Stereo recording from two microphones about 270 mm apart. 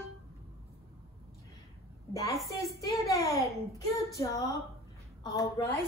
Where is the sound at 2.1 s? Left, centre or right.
Centre.